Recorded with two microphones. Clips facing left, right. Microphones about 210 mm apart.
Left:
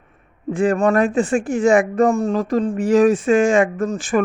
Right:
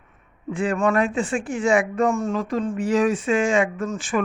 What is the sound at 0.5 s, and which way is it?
Speech, 45° left (ahead or behind).